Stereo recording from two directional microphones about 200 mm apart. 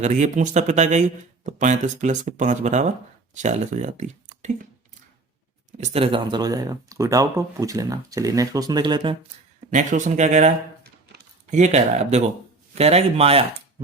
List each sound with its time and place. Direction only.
0.0 s speech: 40° right (ahead or behind)
5.7 s speech: 35° right (ahead or behind)
9.6 s speech: 40° right (ahead or behind)
11.5 s speech: 35° right (ahead or behind)